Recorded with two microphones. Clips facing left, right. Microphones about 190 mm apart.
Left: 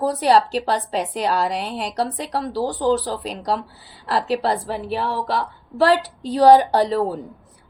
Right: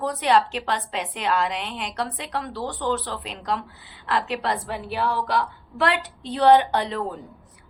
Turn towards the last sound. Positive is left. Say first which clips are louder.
# left 7 dB
turn(degrees=35)  # may be behind; listen again after turning